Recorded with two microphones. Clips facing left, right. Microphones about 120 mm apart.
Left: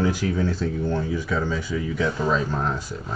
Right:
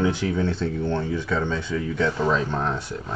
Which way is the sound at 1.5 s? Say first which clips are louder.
Even; 10° left (ahead or behind).